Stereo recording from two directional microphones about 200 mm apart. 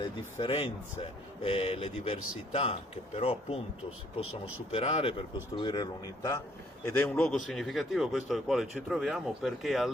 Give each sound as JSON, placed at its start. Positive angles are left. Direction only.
{"t": 0.0, "sound": "speech", "side_deg": 30}
{"t": 4.2, "sound": "speech", "side_deg": 90}
{"t": 4.7, "sound": "speech", "side_deg": 30}
{"t": 6.8, "sound": "speech", "side_deg": 5}